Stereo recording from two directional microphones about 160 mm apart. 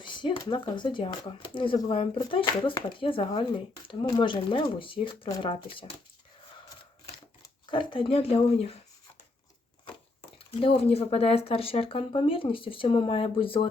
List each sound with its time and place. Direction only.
0.0 s speech: 30° left (ahead or behind)
7.7 s speech: 30° left (ahead or behind)
9.8 s speech: 35° left (ahead or behind)